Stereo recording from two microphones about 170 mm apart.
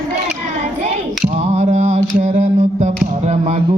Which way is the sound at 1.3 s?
40° right (ahead or behind).